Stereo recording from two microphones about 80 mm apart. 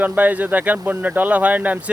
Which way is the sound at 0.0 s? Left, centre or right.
Right.